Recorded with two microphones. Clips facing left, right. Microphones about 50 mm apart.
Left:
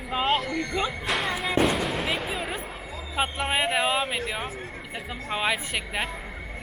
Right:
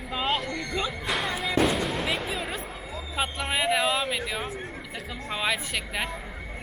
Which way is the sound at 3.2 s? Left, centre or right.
Left.